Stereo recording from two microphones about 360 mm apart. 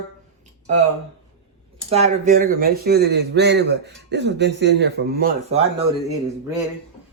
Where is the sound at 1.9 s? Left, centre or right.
Centre.